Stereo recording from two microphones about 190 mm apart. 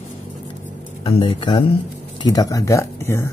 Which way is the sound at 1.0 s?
30° left (ahead or behind).